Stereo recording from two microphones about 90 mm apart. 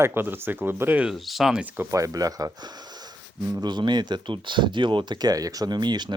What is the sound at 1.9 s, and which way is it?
Speech, 40° right (ahead or behind).